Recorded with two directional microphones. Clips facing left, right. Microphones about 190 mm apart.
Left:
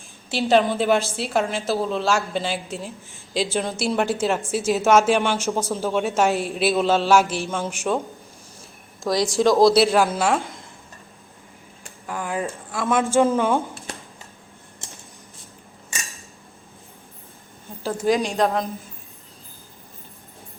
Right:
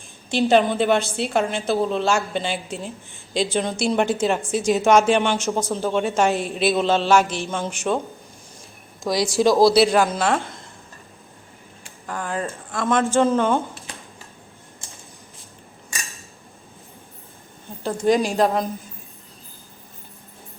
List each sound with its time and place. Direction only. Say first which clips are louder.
0.3 s a woman's voice: right 1 dB; centre (ahead or behind)
9.0 s a woman's voice: even; centre (ahead or behind)
12.0 s speech: even; 10° left (ahead or behind)
17.8 s a woman's voice: right 2 dB; centre (ahead or behind)